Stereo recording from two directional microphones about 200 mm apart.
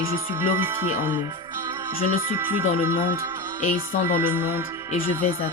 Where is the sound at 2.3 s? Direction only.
10° right (ahead or behind).